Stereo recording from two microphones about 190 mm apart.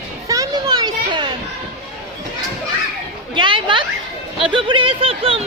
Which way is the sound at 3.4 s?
25° right (ahead or behind).